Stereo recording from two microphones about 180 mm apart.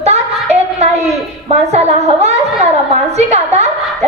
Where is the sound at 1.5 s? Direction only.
35° right (ahead or behind).